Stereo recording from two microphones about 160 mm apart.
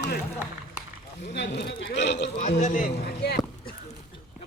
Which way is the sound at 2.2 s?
45° left (ahead or behind).